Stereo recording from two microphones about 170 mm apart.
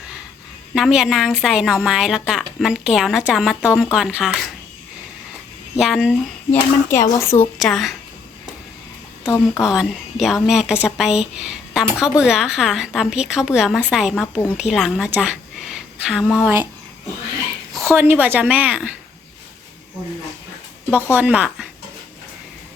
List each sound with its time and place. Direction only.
0.7 s a woman's voice: 5° right (ahead or behind)
5.7 s a woman's voice: 5° right (ahead or behind)
6.5 s speech: 15° left (ahead or behind)
7.6 s a woman's voice: centre (ahead or behind)
9.6 s a woman's voice: 5° right (ahead or behind)
17.9 s speech: 10° right (ahead or behind)
21.2 s speech: 5° right (ahead or behind)